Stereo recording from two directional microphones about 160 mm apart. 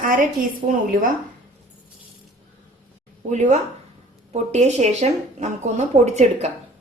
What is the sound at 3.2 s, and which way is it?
Speech, 50° right (ahead or behind).